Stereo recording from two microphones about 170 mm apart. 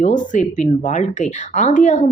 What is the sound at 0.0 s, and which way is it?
A woman's voice, 50° left (ahead or behind).